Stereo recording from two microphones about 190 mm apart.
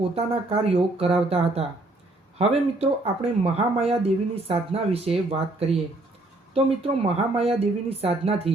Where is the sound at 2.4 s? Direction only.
30° right (ahead or behind).